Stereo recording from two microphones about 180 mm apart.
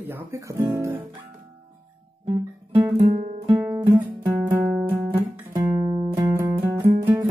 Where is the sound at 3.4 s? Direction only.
10° right (ahead or behind).